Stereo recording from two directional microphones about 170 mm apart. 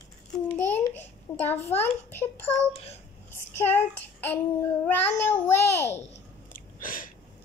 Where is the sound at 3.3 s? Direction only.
10° left (ahead or behind).